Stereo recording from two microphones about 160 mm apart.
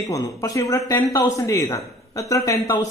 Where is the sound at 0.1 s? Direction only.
20° left (ahead or behind).